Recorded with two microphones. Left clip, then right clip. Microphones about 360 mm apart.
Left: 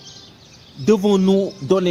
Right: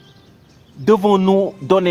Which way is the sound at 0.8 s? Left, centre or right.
Right.